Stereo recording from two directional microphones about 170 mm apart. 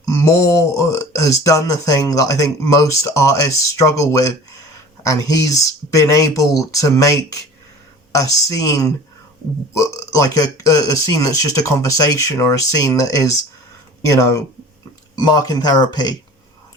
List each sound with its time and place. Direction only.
0.1 s speech: 15° left (ahead or behind)